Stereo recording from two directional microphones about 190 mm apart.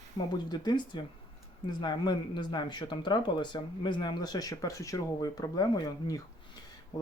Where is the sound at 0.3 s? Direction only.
20° left (ahead or behind).